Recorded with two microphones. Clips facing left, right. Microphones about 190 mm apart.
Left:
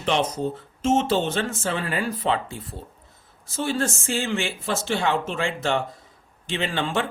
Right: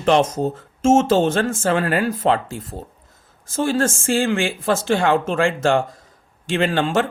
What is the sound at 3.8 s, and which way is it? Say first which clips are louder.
Speech: right 6 dB; 90° right.